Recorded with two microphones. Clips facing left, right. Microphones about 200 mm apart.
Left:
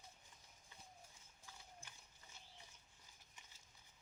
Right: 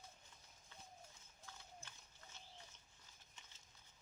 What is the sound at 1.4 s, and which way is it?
Horse, 10° left (ahead or behind).